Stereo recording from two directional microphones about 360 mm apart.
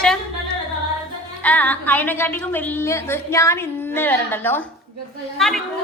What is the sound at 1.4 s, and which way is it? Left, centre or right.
A woman's voice, centre.